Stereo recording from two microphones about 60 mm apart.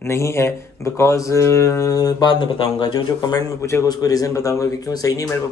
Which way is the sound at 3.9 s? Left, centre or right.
Left.